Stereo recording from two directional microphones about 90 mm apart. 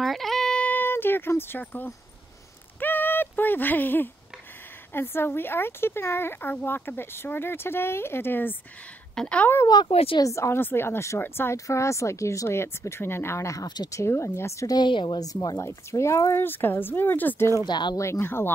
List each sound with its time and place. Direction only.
0.0 s a sound: centre (ahead or behind); by 4.1 s 20° left (ahead or behind)
4.9 s speech: 25° left (ahead or behind)
9.1 s a woman's voice: 10° left (ahead or behind)
9.8 s speech: 90° left
10.2 s speech: 35° left (ahead or behind)
14.7 s a woman's voice: 60° left (ahead or behind)
15.1 s a woman's voice: 45° left (ahead or behind)
15.6 s speech: 30° left (ahead or behind)
16.4 s speech: 25° left (ahead or behind)
17.6 s a woman's voice: 55° left (ahead or behind)
17.9 s speech: 35° left (ahead or behind)